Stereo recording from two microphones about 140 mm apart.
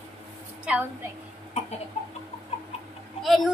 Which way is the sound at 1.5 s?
50° left (ahead or behind).